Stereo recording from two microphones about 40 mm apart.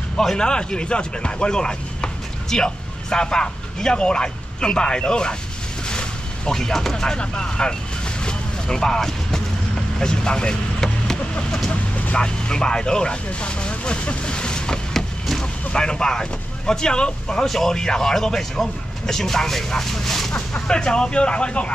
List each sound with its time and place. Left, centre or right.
0.2 s a man's voice: centre
5.9 s a sound: left
6.5 s speech: centre
8.2 s vehicle: centre
12.2 s speech: centre
15.0 s a sound: centre
15.7 s speech: left
17.5 s speech: centre
20.6 s speech: left